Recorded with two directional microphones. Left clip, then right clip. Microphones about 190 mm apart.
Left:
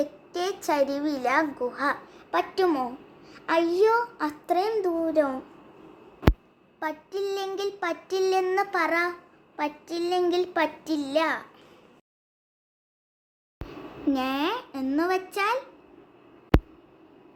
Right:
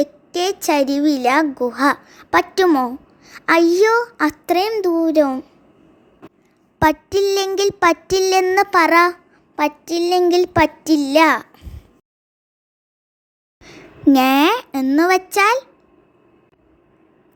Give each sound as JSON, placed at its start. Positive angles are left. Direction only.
{"t": 0.0, "sound": "a woman's voice", "side_deg": -40}
{"t": 6.2, "sound": "a sound", "side_deg": 0}
{"t": 6.7, "sound": "a woman's voice", "side_deg": -50}
{"t": 13.7, "sound": "a woman's voice", "side_deg": -55}